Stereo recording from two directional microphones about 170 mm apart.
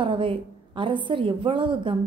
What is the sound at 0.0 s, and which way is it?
A woman's voice, 30° right (ahead or behind).